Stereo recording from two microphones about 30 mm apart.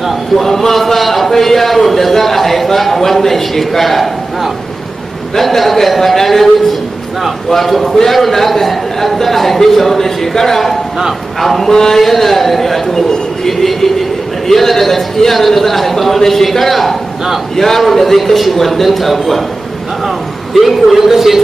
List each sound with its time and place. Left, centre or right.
0.4 s a man's voice: centre
20.5 s a man's voice: centre